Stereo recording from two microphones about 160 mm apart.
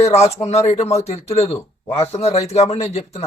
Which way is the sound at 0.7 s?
40° left (ahead or behind).